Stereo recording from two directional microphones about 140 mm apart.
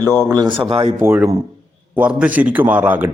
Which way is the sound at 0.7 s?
45° right (ahead or behind).